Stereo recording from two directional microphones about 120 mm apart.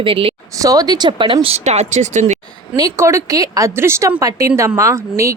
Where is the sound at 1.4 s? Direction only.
65° right (ahead or behind).